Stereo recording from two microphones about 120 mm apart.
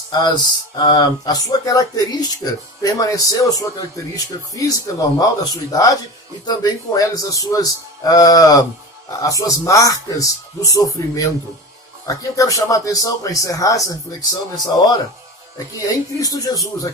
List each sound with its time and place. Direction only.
0.1 s a man's voice: 35° left (ahead or behind)
16.1 s a man's voice: 30° left (ahead or behind)